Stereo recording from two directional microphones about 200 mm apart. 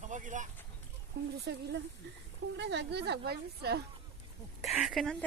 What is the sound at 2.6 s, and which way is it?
A woman's voice, 60° right (ahead or behind).